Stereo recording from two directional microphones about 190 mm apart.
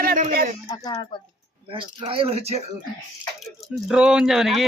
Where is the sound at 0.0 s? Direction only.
45° right (ahead or behind).